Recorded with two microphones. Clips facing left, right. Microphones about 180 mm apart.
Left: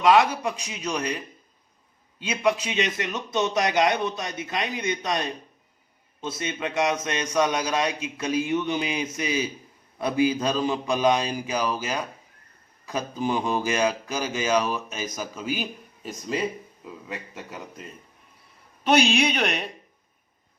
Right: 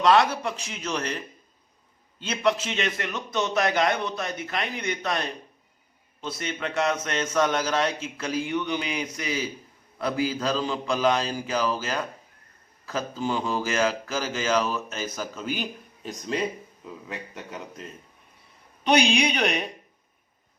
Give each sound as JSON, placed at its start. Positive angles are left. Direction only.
{"t": 0.0, "sound": "speech", "side_deg": 10}
{"t": 6.2, "sound": "speech", "side_deg": 20}